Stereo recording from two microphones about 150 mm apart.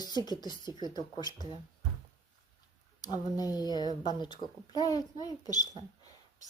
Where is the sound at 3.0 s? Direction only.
25° left (ahead or behind).